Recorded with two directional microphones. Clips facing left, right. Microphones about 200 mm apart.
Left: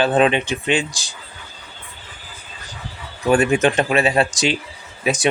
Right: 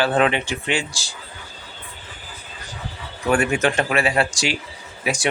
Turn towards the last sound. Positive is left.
turn(degrees=20)  # may be behind; listen again after turning